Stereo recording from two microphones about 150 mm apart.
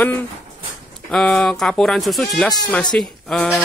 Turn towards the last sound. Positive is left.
turn(degrees=0)  # may be behind; listen again after turning